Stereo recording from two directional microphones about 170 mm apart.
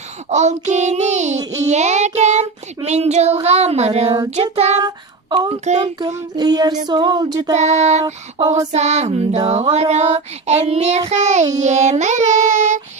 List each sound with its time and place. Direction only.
0.3 s child singing: 40° right (ahead or behind)
4.8 s child singing: 25° right (ahead or behind)
5.5 s child singing: 40° right (ahead or behind)
6.1 s child singing: 25° right (ahead or behind)
7.5 s child singing: 40° right (ahead or behind)
8.0 s child singing: 20° right (ahead or behind)
8.7 s child singing: 40° right (ahead or behind)